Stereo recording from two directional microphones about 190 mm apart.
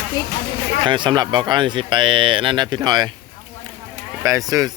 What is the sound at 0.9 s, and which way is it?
Speech, 25° right (ahead or behind).